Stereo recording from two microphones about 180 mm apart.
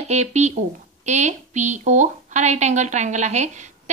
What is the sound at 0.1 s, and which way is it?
A woman's voice, 40° right (ahead or behind).